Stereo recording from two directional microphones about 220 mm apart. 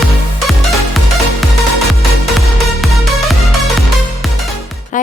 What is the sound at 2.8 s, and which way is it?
Music, centre (ahead or behind).